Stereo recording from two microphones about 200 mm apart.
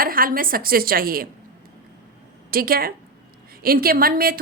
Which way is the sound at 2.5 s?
50° right (ahead or behind).